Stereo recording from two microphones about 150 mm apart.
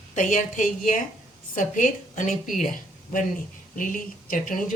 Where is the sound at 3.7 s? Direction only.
65° left (ahead or behind).